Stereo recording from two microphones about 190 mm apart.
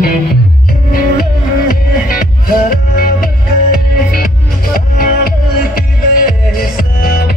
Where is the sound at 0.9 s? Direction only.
50° left (ahead or behind).